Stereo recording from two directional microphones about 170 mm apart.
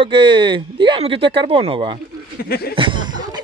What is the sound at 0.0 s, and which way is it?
Speech, 30° right (ahead or behind).